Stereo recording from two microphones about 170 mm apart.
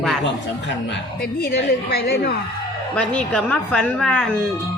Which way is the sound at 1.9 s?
70° left (ahead or behind).